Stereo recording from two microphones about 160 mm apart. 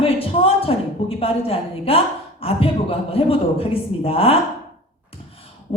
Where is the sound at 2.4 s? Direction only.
35° left (ahead or behind).